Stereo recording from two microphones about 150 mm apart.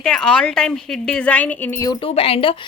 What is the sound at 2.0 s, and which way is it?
Speech, 40° left (ahead or behind).